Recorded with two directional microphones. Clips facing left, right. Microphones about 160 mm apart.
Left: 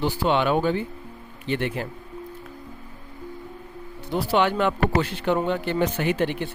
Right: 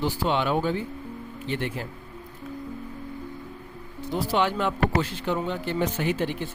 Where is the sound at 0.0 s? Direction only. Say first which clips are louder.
Left 3 dB; 65° left (ahead or behind).